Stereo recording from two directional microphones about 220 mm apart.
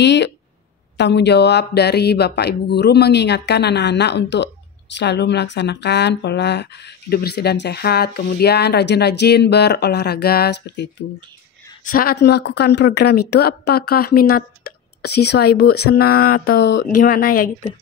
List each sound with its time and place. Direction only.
0.0 s speech: 50° left (ahead or behind)
16.0 s speech: 90° left
16.3 s speech: 45° left (ahead or behind)